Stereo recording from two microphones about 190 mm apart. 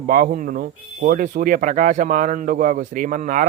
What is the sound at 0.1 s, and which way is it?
Speech, 45° right (ahead or behind).